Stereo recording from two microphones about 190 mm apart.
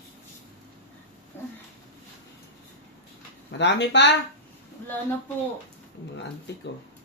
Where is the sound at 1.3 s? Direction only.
10° left (ahead or behind).